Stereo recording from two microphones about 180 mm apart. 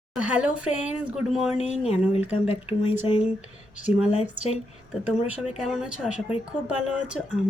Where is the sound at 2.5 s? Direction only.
35° left (ahead or behind).